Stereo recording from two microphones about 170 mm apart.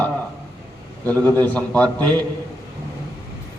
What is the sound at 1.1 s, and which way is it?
A man's voice, 10° left (ahead or behind).